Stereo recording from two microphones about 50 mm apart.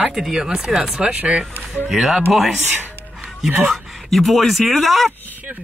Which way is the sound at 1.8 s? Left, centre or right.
Centre.